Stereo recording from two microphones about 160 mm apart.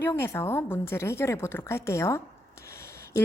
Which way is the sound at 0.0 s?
15° left (ahead or behind).